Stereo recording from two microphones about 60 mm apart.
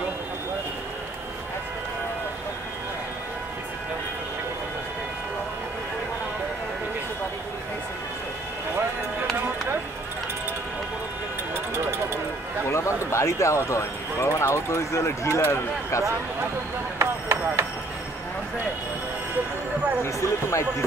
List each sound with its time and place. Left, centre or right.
12.6 s a sound: left
13.7 s speech: left
17.0 s vehicle: right
20.0 s speech: left